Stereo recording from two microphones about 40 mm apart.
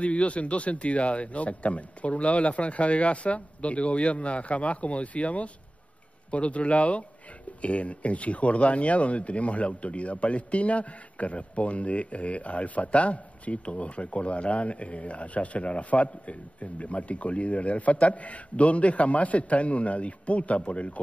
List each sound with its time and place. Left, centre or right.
0.0 s speech: left